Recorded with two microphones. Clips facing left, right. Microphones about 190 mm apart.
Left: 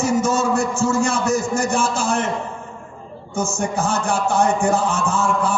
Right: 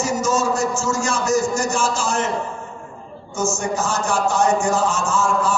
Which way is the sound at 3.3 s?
55° left (ahead or behind).